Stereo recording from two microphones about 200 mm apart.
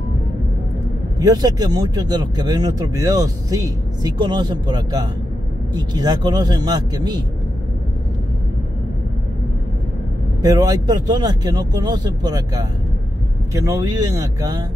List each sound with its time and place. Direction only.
1.2 s speech: 20° right (ahead or behind)
10.4 s speech: 20° right (ahead or behind)